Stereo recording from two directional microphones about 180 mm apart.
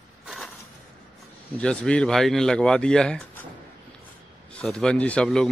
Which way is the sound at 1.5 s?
5° left (ahead or behind).